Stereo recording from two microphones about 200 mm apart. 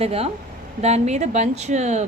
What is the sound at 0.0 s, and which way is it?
A woman's voice, 30° right (ahead or behind).